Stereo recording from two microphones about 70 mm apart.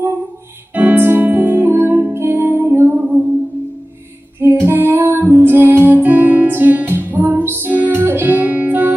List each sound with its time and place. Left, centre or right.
0.7 s music: right
4.4 s music: right
7.7 s music: right
7.9 s music: right